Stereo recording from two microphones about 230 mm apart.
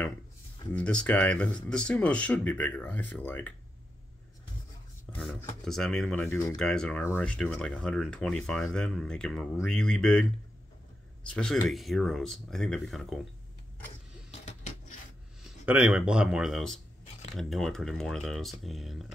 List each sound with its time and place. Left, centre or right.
0.7 s speech: centre
5.1 s speech: centre
11.2 s speech: centre
14.4 s coin: left
15.4 s speech: centre